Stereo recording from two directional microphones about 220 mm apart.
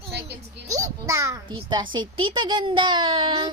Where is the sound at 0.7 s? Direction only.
15° right (ahead or behind).